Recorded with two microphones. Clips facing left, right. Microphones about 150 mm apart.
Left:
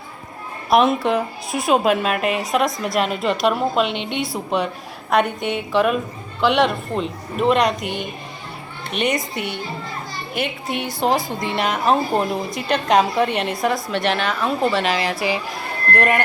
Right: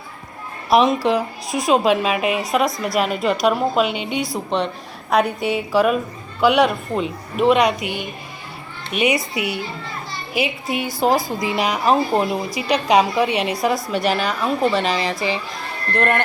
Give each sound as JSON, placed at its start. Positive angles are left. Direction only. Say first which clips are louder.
{"t": 0.7, "sound": "a woman's voice", "louder": "right 1 dB", "side_deg": 0}